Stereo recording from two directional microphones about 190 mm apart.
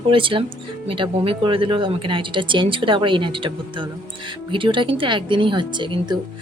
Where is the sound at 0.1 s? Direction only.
25° right (ahead or behind).